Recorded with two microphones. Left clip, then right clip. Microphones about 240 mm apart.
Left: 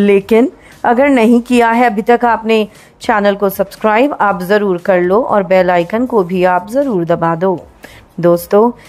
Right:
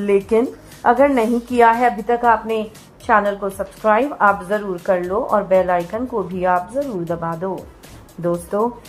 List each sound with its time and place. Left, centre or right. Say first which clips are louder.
0.0 s a woman's voice: left 7 dB; left